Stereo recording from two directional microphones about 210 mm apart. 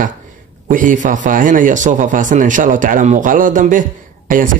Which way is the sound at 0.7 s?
40° right (ahead or behind).